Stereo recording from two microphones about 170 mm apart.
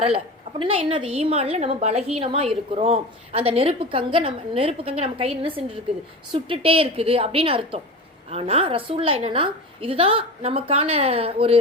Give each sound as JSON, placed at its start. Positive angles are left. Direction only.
{"t": 0.6, "sound": "a woman's voice", "side_deg": -30}